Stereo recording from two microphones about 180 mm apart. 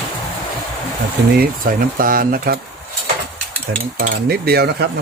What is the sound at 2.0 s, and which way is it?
Speech, 50° right (ahead or behind).